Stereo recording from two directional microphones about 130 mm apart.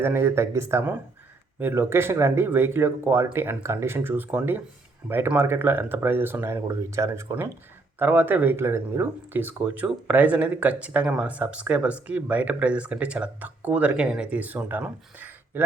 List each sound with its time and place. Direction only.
0.0 s speech: 20° right (ahead or behind)